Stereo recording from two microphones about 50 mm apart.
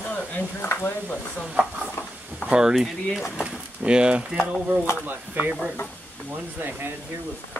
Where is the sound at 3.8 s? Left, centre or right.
Centre.